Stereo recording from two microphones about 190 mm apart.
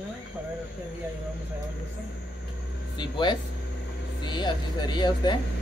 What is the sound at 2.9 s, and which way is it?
Speech, 25° left (ahead or behind).